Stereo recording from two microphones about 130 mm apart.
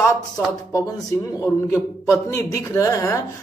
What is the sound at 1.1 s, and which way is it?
Speech, 20° left (ahead or behind).